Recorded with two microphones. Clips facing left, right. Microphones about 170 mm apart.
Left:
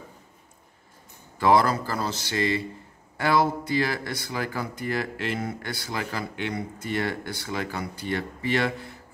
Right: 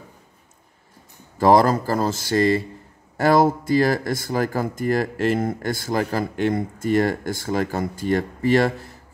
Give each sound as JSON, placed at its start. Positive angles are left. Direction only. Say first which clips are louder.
{"t": 1.4, "sound": "speech", "louder": "right 5 dB", "side_deg": -40}